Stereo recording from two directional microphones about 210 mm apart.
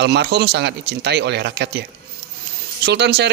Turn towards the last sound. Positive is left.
turn(degrees=-55)  # may be behind; listen again after turning